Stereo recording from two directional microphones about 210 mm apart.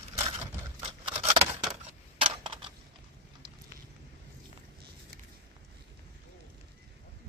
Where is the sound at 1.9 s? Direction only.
25° right (ahead or behind).